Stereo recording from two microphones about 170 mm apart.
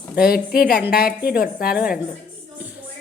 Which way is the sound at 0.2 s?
60° left (ahead or behind).